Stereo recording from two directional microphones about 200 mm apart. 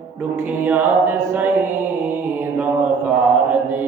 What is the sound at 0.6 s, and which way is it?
Mantra, 10° right (ahead or behind).